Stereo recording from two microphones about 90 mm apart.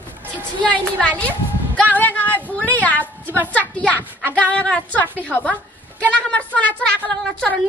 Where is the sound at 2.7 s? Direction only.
15° left (ahead or behind).